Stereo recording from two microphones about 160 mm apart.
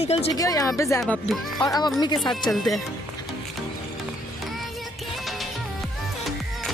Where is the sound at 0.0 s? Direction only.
40° left (ahead or behind).